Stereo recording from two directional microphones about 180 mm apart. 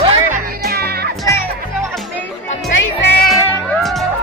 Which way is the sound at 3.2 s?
Centre (ahead or behind).